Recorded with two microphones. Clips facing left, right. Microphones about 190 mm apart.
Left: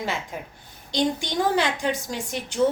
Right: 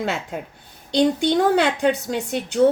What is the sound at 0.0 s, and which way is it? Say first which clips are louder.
A woman's voice: right 4 dB; 65° right (ahead or behind).